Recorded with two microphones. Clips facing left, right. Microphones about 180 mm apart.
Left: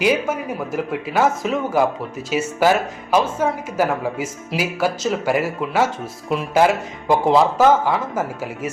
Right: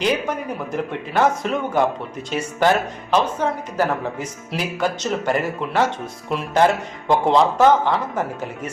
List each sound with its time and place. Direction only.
0.0 s a man's voice: 5° left (ahead or behind)